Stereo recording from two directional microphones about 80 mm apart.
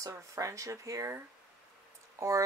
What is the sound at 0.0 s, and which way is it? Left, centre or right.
Speech, right.